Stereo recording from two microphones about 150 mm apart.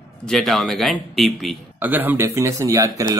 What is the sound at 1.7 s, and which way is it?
Speech, 10° right (ahead or behind).